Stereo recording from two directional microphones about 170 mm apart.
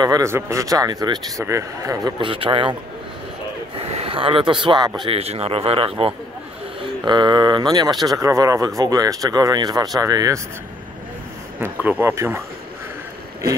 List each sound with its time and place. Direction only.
0.0 s speech: 20° right (ahead or behind)
3.7 s a man's voice: 35° right (ahead or behind)
11.6 s speech: 10° right (ahead or behind)